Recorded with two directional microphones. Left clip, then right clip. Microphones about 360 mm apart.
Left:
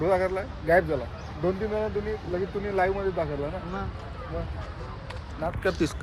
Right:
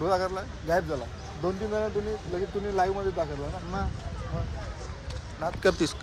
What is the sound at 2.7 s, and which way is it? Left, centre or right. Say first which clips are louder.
Speech: left 1 dB; centre.